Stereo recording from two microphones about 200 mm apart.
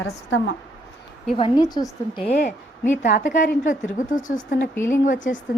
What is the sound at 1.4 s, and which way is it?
Speech, 20° left (ahead or behind).